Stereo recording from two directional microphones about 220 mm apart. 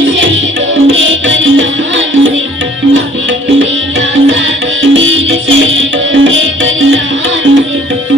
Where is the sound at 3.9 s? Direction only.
60° right (ahead or behind).